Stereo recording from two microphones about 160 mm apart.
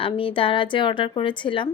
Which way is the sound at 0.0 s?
35° left (ahead or behind).